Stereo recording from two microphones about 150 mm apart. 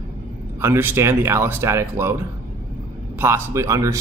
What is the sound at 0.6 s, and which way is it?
Speech, 15° right (ahead or behind).